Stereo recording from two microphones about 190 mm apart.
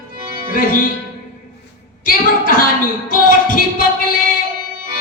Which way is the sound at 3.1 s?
45° left (ahead or behind).